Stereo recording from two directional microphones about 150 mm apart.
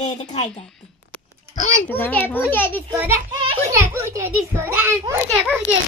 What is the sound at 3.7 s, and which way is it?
A child's voice, 15° right (ahead or behind).